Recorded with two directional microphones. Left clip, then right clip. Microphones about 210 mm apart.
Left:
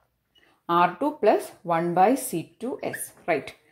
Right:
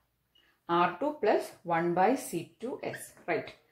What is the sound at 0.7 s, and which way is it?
Speech, 35° left (ahead or behind).